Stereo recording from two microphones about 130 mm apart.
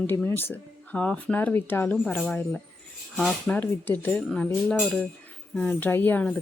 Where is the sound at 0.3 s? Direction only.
15° left (ahead or behind).